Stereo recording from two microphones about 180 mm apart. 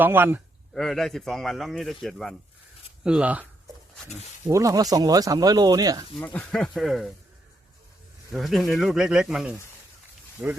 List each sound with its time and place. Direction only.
0.0 s speech: 10° right (ahead or behind)
0.7 s a man's voice: centre (ahead or behind)
4.4 s speech: 20° right (ahead or behind)
6.1 s a man's voice: 10° left (ahead or behind)
8.3 s a man's voice: centre (ahead or behind)